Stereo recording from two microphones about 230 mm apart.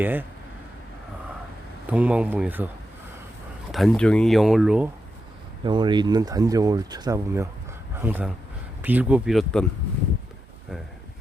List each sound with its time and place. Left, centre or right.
0.0 s speech: centre
1.9 s speech: centre
3.7 s speech: centre
5.6 s speech: centre